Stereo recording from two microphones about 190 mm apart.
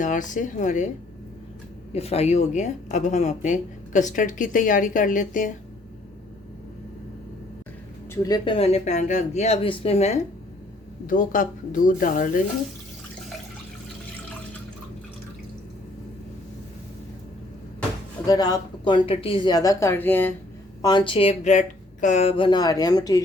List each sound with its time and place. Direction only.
0.0 s speech: 40° left (ahead or behind)
1.9 s speech: 35° left (ahead or behind)
8.1 s speech: 20° left (ahead or behind)
11.0 s speech: 45° left (ahead or behind)
18.3 s a woman's voice: 20° left (ahead or behind)
20.8 s a woman's voice: 25° left (ahead or behind)